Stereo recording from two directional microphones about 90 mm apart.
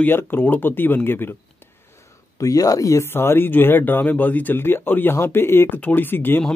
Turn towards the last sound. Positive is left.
turn(degrees=25)  # may be behind; listen again after turning